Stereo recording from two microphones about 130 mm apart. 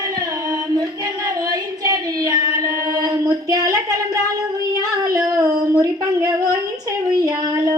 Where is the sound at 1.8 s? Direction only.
30° right (ahead or behind).